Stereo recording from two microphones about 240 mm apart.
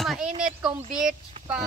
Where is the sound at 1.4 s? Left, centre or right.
Right.